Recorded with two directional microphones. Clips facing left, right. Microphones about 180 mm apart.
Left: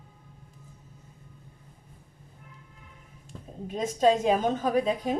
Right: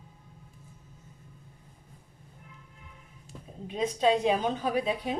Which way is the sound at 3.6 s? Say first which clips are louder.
Left 2 dB; 45° left (ahead or behind).